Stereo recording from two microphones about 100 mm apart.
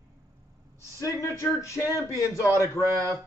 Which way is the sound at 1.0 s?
30° left (ahead or behind).